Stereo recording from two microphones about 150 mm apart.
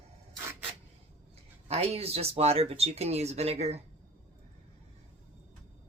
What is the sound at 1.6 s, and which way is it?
Speech, 45° right (ahead or behind).